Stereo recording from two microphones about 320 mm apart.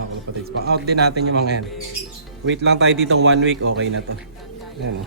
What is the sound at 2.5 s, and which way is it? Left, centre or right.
Speech, right.